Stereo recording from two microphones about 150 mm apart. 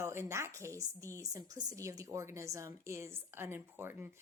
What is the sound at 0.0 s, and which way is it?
A woman's voice, 15° right (ahead or behind).